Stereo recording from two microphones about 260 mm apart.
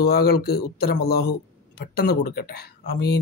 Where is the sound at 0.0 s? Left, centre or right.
Left.